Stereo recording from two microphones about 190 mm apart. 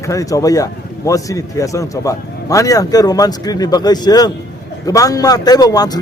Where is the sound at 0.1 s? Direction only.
15° left (ahead or behind).